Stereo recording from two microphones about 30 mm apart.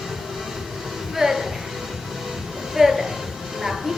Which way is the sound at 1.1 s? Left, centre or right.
Centre.